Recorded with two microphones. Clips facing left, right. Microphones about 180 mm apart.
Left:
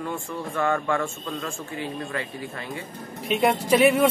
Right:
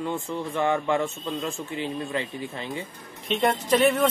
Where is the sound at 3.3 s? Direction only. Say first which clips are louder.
Left 2 dB; 10° left (ahead or behind).